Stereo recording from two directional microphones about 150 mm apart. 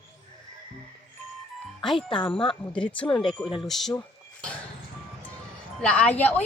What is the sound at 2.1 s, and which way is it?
Speech, 35° left (ahead or behind).